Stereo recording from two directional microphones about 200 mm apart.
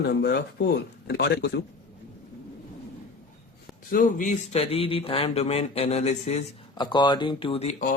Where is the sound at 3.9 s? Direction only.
45° left (ahead or behind).